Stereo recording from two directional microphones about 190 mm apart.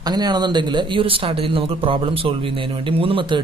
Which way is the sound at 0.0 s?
20° right (ahead or behind).